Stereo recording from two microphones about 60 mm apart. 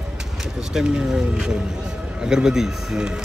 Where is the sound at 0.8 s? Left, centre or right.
Centre.